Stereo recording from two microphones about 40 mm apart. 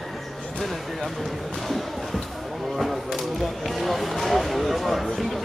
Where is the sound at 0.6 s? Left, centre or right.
Centre.